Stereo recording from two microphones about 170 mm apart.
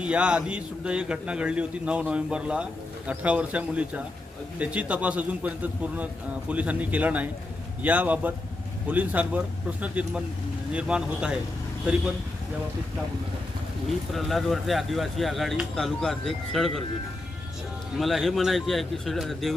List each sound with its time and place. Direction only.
0.0 s a man's voice: 5° right (ahead or behind)
14.1 s speech: centre (ahead or behind)
17.9 s speech: centre (ahead or behind)